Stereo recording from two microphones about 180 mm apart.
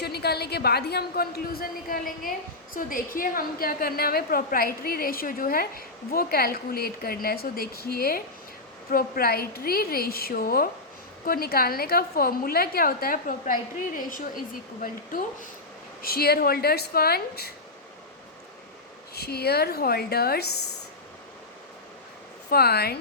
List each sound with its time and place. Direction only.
0.0 s a woman's voice: 60° left (ahead or behind)
19.1 s a woman's voice: 60° left (ahead or behind)
22.4 s a woman's voice: 60° left (ahead or behind)